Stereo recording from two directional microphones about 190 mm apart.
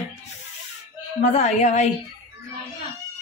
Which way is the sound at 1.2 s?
35° left (ahead or behind).